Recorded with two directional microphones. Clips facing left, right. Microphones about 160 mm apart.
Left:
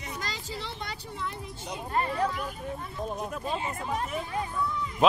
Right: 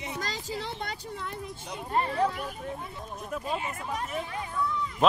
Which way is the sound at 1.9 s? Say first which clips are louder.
Right 2 dB; 25° right (ahead or behind).